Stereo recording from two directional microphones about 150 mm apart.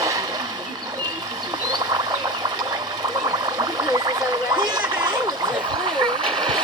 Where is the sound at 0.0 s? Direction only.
20° right (ahead or behind).